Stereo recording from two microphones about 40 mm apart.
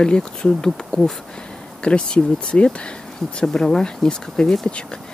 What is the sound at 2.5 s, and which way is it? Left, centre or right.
Speech, left.